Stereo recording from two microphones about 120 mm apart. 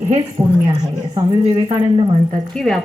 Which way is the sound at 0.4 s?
45° right (ahead or behind).